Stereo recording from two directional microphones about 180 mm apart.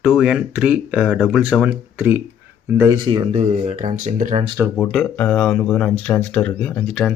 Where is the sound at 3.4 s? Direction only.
40° right (ahead or behind).